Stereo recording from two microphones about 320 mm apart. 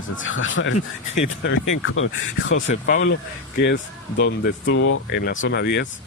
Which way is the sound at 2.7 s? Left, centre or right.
Left.